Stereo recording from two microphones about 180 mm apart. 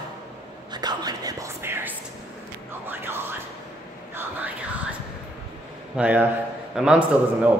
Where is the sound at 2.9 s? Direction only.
15° right (ahead or behind).